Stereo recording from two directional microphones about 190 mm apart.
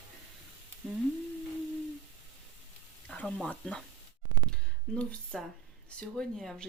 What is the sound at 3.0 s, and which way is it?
Speech, 5° left (ahead or behind).